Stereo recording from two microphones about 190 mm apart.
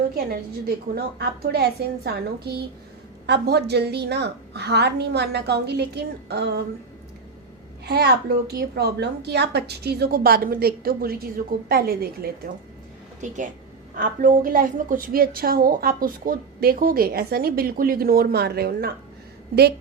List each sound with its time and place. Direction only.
0.3 s a woman's voice: 55° right (ahead or behind)
7.9 s a woman's voice: 60° right (ahead or behind)
13.2 s a woman's voice: 40° right (ahead or behind)